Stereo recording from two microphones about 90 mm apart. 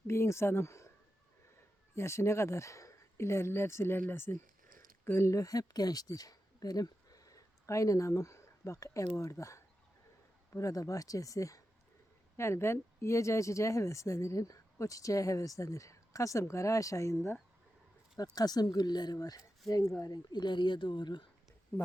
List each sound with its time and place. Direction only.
0.1 s speech: 30° left (ahead or behind)
2.0 s speech: 30° left (ahead or behind)
18.2 s speech: 45° left (ahead or behind)